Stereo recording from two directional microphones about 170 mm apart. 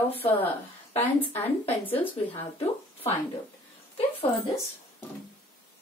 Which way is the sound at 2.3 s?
30° left (ahead or behind).